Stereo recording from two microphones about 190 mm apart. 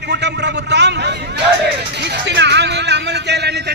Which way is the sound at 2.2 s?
65° right (ahead or behind).